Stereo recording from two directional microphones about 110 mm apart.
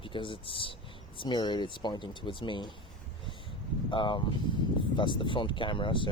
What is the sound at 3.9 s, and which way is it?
Speech, 45° left (ahead or behind).